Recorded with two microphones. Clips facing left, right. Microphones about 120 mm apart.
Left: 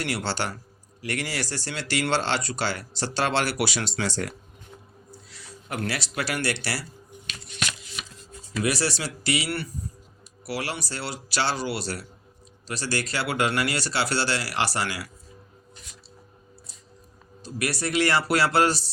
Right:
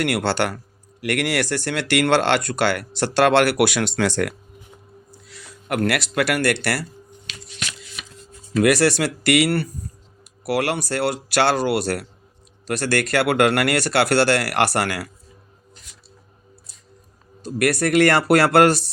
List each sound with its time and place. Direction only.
0.0 s speech: 60° right (ahead or behind)
7.4 s shuffling cards: 55° left (ahead or behind)
8.5 s speech: 60° right (ahead or behind)
17.4 s speech: 55° right (ahead or behind)